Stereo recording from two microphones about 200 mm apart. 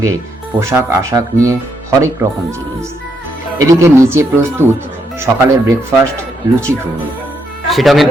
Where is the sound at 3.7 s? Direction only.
15° right (ahead or behind).